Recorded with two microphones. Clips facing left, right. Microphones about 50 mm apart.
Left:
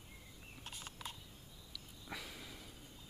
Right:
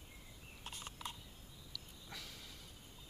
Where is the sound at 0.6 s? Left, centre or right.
Centre.